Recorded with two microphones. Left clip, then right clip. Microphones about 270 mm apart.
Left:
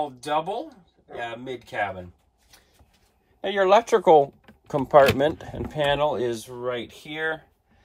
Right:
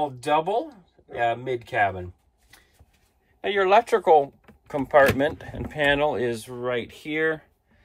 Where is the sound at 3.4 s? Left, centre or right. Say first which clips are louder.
Even; left.